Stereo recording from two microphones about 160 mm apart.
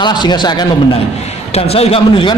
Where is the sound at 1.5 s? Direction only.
40° left (ahead or behind).